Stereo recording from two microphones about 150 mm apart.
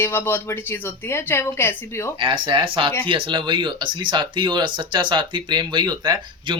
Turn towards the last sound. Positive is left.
turn(degrees=-30)  # may be behind; listen again after turning